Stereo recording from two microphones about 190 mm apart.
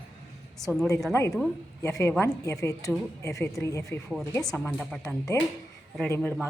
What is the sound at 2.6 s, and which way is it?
A woman's voice, 15° left (ahead or behind).